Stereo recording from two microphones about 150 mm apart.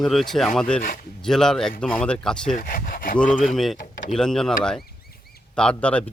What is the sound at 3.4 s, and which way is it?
Speech, centre (ahead or behind).